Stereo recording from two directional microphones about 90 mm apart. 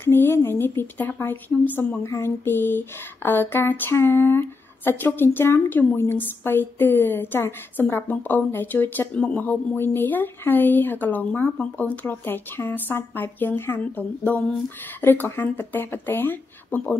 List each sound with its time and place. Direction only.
0.0 s speech: 25° left (ahead or behind)